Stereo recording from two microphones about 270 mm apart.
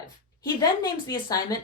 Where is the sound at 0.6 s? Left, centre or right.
Centre.